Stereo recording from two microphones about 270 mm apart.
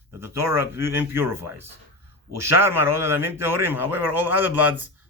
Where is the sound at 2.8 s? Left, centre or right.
Right.